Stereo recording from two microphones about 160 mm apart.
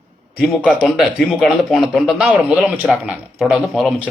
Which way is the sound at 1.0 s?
Centre (ahead or behind).